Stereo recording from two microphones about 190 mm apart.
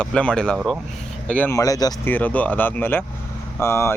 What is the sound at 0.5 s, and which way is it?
Speech, 5° right (ahead or behind).